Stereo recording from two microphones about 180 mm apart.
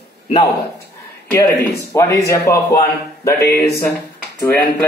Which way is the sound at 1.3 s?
10° left (ahead or behind).